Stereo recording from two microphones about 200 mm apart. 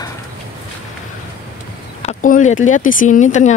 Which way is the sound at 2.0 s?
40° left (ahead or behind).